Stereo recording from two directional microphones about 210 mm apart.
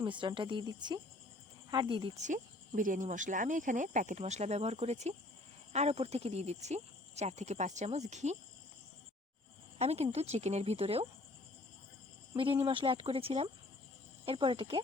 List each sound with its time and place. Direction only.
0.0 s speech: 20° right (ahead or behind)
9.7 s speech: 30° right (ahead or behind)
12.4 s speech: 25° right (ahead or behind)